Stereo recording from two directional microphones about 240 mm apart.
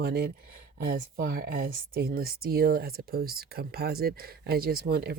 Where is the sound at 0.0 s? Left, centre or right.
Right.